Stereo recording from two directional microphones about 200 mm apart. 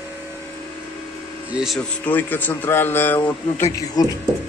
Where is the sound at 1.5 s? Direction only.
5° right (ahead or behind).